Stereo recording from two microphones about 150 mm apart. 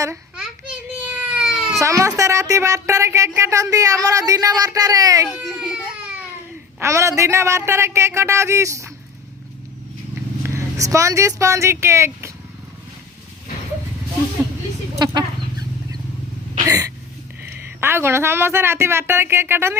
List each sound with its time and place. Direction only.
0.9 s a sound: 10° right (ahead or behind)
1.8 s speech: 20° right (ahead or behind)
5.3 s baby cry: 5° right (ahead or behind)
6.7 s speech: 20° right (ahead or behind)
10.4 s speech: 20° right (ahead or behind)
14.9 s chicken: 30° right (ahead or behind)
16.6 s a sound: 20° right (ahead or behind)
17.5 s speech: 15° right (ahead or behind)